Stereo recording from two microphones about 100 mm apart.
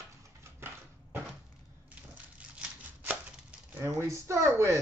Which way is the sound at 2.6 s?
10° right (ahead or behind).